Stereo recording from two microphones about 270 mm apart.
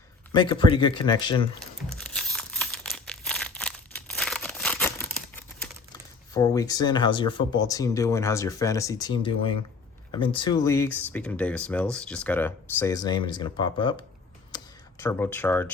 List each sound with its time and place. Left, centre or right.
0.3 s speech: centre
2.1 s crumpling: centre
5.9 s speech: centre
14.5 s a sound: centre